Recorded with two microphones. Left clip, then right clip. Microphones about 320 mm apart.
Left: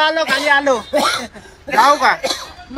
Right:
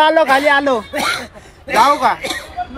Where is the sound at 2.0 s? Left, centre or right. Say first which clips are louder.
Left 1 dB; centre.